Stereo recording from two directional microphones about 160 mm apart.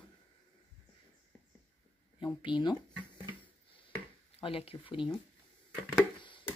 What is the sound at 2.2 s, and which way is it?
Speech, 30° left (ahead or behind).